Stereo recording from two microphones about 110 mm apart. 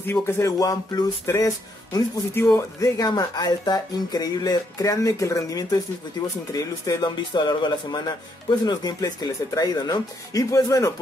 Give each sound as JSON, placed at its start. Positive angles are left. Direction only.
{"t": 0.0, "sound": "speech", "side_deg": 25}